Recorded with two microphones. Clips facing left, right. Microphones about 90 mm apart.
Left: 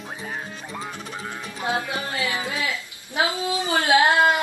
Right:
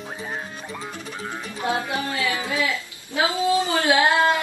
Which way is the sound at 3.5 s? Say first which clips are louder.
Left 1 dB; 20° left (ahead or behind).